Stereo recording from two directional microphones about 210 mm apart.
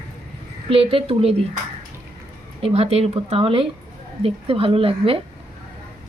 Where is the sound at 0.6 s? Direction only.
25° right (ahead or behind).